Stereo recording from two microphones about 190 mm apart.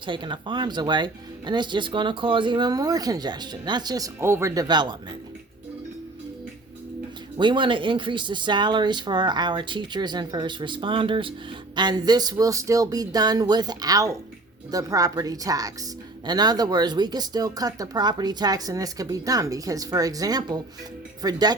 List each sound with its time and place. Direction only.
0.0 s speech: 25° right (ahead or behind)
7.3 s speech: 25° right (ahead or behind)